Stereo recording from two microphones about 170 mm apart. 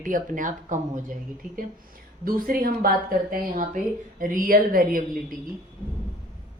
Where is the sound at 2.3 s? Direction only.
55° right (ahead or behind).